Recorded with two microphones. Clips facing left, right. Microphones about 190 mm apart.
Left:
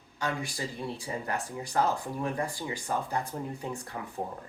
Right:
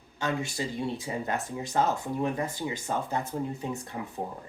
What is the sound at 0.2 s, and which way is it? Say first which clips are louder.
Speech: right 3 dB; 25° right (ahead or behind).